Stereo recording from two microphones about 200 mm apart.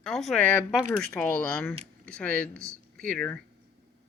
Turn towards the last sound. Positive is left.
turn(degrees=5)  # may be behind; listen again after turning